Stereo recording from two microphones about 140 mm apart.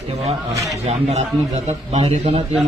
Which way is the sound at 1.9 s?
50° right (ahead or behind).